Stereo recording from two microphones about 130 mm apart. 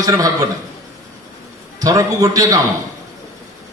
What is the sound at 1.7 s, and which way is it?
Speech, 25° right (ahead or behind).